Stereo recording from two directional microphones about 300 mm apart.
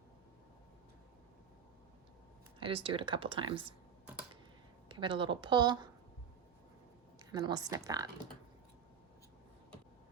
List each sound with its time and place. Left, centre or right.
2.6 s speech: centre
4.9 s speech: centre
7.3 s speech: centre